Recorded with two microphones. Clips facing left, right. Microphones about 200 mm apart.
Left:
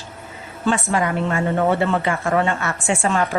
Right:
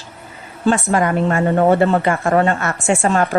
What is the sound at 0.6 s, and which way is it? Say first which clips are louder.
Speech: right 4 dB; 45° right (ahead or behind).